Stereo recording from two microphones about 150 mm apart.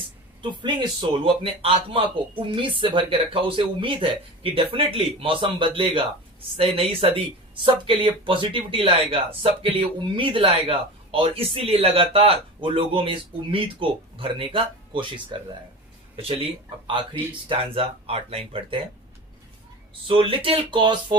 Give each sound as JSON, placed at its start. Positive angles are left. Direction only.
{"t": 0.6, "sound": "speech", "side_deg": -30}
{"t": 19.9, "sound": "speech", "side_deg": -35}